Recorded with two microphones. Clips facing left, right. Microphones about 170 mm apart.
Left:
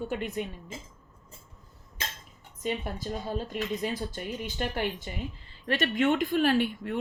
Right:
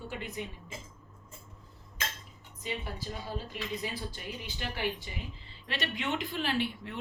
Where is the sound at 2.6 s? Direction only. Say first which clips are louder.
Left 6 dB; 50° left (ahead or behind).